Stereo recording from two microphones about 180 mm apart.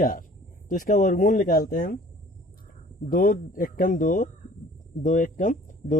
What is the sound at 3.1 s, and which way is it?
Speech, 50° left (ahead or behind).